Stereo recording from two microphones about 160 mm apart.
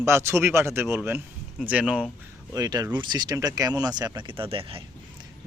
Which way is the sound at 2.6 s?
25° right (ahead or behind).